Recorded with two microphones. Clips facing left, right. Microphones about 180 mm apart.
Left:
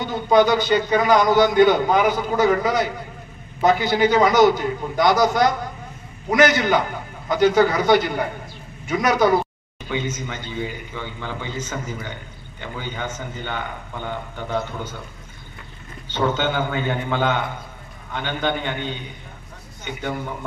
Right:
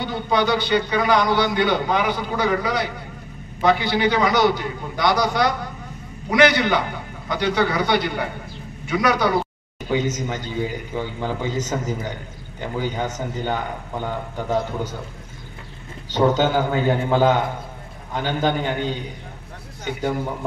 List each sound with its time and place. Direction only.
0.0 s a man's voice: 45° left (ahead or behind)
9.8 s a man's voice: 40° right (ahead or behind)
16.1 s a man's voice: 35° right (ahead or behind)